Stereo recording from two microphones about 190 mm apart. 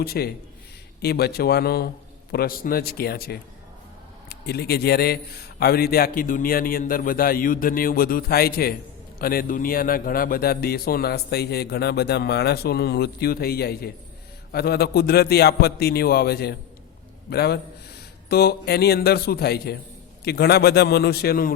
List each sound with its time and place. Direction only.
0.0 s a man's voice: 55° left (ahead or behind)